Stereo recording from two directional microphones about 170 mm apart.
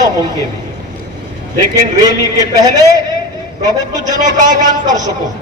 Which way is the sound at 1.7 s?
20° right (ahead or behind).